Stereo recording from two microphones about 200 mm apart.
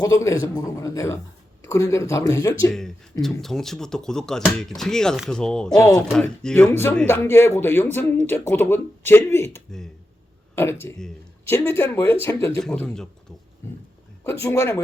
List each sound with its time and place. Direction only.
0.0 s speech: 15° left (ahead or behind)
2.7 s speech: centre (ahead or behind)